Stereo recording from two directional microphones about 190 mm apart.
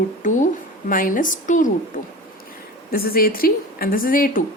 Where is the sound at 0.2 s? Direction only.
40° left (ahead or behind).